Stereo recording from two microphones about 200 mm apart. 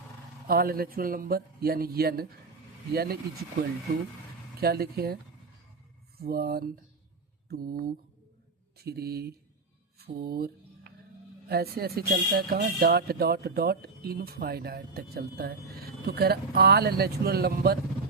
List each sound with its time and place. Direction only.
0.4 s speech: 50° right (ahead or behind)
4.6 s speech: 50° right (ahead or behind)
7.4 s mantra: 50° right (ahead or behind)
8.8 s speech: 50° right (ahead or behind)
10.0 s a sound: 45° right (ahead or behind)
11.4 s speech: 50° right (ahead or behind)